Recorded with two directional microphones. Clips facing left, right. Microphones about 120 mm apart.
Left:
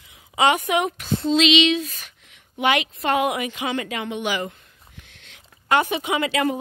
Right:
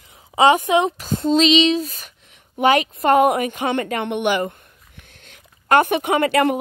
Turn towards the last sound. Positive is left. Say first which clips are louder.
# right 5 dB
turn(degrees=-60)  # may be behind; listen again after turning